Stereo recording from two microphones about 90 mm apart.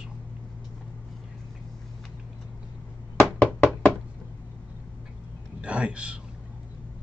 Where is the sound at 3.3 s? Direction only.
15° left (ahead or behind).